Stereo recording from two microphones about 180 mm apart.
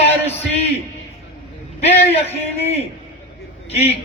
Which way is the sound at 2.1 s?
35° left (ahead or behind).